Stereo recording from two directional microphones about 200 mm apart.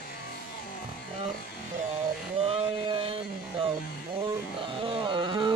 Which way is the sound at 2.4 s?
30° right (ahead or behind).